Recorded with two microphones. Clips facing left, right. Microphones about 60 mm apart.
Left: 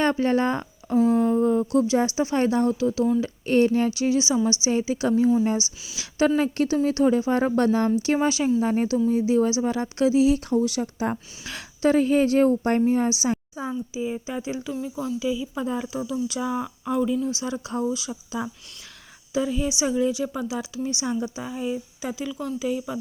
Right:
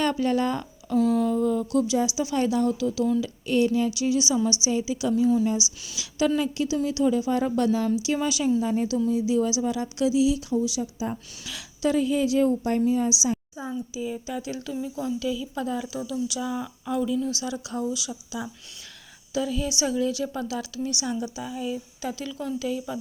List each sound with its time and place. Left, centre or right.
0.0 s speech: left
0.9 s a woman's voice: centre
1.3 s speech: left
2.0 s a woman's voice: left
11.4 s a woman's voice: left
13.9 s a woman's voice: left
14.7 s speech: centre
15.2 s a woman's voice: centre
15.6 s a woman's voice: left
19.3 s a woman's voice: left
22.1 s a woman's voice: centre